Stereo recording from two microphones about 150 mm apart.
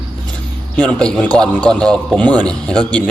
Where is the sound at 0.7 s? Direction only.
5° left (ahead or behind).